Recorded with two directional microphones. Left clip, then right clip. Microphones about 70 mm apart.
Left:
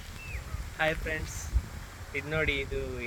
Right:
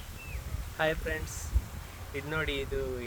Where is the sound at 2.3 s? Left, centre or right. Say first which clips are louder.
Left 3 dB; right.